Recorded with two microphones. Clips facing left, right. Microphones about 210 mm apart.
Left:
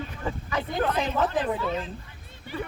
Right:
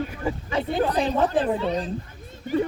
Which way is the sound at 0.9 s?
35° right (ahead or behind).